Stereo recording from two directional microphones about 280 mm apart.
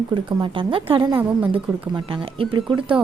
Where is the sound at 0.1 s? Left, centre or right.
Centre.